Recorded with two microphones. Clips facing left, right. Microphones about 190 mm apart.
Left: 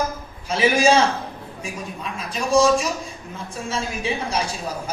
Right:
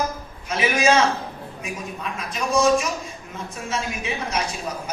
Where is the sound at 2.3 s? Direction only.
30° left (ahead or behind).